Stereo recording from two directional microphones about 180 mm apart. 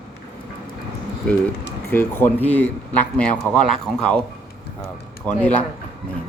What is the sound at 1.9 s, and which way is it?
Speech, 10° left (ahead or behind).